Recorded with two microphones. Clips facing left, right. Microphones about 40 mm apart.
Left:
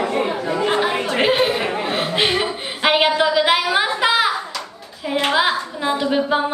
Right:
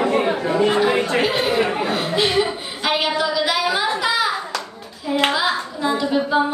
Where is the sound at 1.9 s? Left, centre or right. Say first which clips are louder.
Left 1 dB; left.